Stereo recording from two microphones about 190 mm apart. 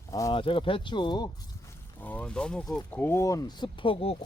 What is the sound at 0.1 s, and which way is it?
Speech, 20° left (ahead or behind).